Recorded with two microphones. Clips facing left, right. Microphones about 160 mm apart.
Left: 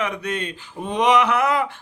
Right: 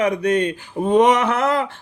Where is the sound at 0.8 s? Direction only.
50° right (ahead or behind).